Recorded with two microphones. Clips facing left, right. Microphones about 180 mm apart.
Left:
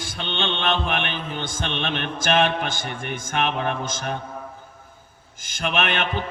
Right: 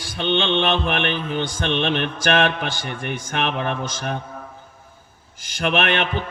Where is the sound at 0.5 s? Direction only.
55° right (ahead or behind).